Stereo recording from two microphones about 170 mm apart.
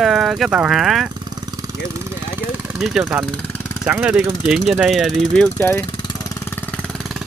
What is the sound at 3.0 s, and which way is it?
Speech, 15° right (ahead or behind).